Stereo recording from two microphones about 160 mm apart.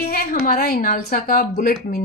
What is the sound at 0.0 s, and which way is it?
Speech, 70° left (ahead or behind).